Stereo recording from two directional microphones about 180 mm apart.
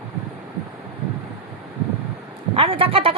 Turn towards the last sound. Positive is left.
turn(degrees=-30)  # may be behind; listen again after turning